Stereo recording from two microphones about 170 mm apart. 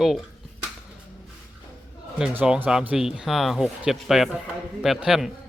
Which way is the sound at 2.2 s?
5° right (ahead or behind).